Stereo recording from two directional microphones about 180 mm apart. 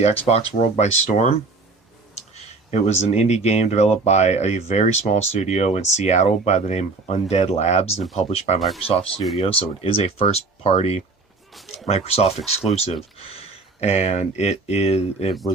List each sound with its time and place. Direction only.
0.0 s speech: 35° left (ahead or behind)